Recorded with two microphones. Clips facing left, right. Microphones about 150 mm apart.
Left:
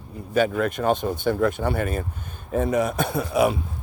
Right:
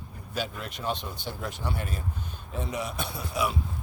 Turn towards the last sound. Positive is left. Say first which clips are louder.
# left 10 dB
turn(degrees=55)  # may be behind; listen again after turning